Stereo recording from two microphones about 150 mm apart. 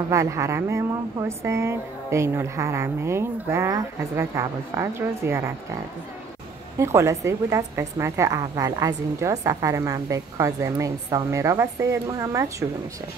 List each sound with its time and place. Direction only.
0.1 s speech: 20° right (ahead or behind)
6.8 s a woman's voice: 20° right (ahead or behind)